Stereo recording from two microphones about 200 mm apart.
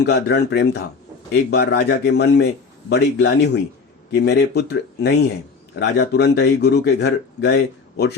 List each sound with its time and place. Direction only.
0.0 s a man's voice: 55° left (ahead or behind)